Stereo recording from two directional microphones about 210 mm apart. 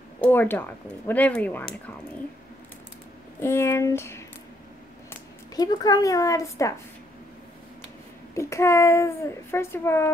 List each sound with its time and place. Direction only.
0.2 s a child's voice: 10° left (ahead or behind)
3.3 s a child's voice: 10° left (ahead or behind)
5.6 s a child's voice: 15° left (ahead or behind)
8.4 s a child's voice: 15° left (ahead or behind)